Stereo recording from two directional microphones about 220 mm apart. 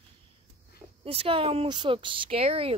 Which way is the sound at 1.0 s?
25° right (ahead or behind).